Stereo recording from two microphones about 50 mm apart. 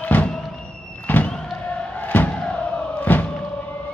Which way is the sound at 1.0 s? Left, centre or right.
Left.